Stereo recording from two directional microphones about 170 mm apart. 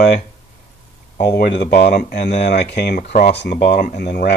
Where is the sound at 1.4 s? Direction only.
70° left (ahead or behind); by 3.4 s 50° left (ahead or behind).